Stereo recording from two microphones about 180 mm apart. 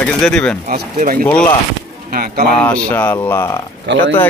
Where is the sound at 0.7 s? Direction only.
50° right (ahead or behind).